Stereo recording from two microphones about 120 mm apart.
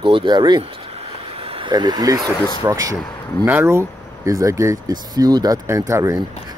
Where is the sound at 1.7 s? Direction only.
35° right (ahead or behind).